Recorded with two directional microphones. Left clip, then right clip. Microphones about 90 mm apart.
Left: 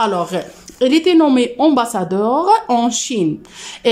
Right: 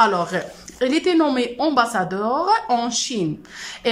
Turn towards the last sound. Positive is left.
turn(degrees=30)  # may be behind; listen again after turning